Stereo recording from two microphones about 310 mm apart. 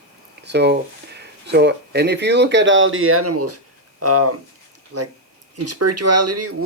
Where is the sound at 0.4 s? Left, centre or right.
Right.